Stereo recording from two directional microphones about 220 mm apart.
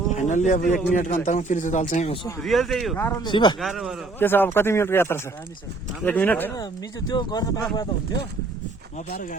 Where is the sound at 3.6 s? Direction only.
Centre (ahead or behind); by 7.7 s 15° left (ahead or behind).